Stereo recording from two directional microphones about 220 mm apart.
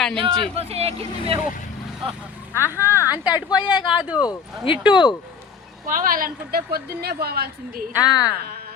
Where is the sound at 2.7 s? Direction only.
10° right (ahead or behind).